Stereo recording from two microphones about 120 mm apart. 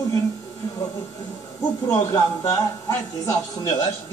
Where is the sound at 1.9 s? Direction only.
35° left (ahead or behind).